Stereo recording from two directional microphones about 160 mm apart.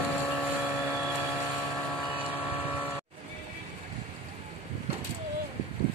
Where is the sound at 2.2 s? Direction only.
10° left (ahead or behind).